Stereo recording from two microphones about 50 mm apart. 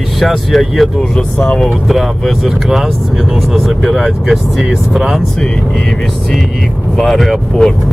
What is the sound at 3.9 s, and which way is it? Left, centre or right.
Speech, centre.